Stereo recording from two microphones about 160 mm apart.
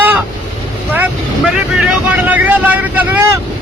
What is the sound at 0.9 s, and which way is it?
Speech, 10° right (ahead or behind).